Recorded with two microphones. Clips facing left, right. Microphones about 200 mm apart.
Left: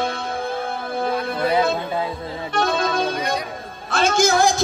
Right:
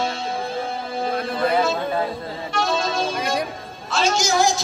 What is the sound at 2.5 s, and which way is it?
Music, 55° left (ahead or behind).